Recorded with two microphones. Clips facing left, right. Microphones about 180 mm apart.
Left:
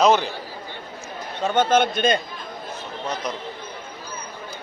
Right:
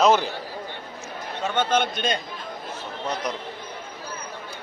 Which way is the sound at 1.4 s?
45° left (ahead or behind).